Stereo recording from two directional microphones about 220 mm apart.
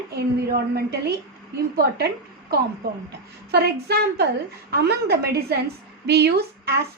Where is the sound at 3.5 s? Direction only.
45° right (ahead or behind).